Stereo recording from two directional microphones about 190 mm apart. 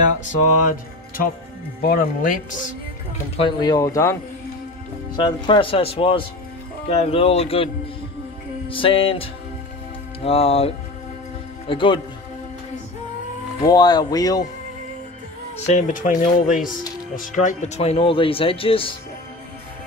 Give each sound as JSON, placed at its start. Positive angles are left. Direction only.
{"t": 0.4, "sound": "music", "side_deg": 45}
{"t": 1.8, "sound": "speech", "side_deg": 50}
{"t": 3.3, "sound": "speech", "side_deg": 25}
{"t": 13.6, "sound": "speech", "side_deg": 20}
{"t": 15.5, "sound": "speech", "side_deg": 35}